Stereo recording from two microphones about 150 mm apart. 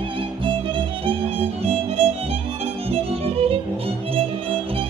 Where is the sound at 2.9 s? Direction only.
40° right (ahead or behind).